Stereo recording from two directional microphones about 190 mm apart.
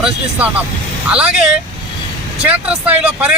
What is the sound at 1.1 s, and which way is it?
Speech, 5° right (ahead or behind).